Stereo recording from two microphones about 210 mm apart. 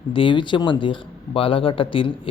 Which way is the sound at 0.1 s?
25° left (ahead or behind).